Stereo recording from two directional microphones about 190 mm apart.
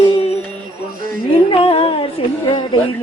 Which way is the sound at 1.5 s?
30° left (ahead or behind).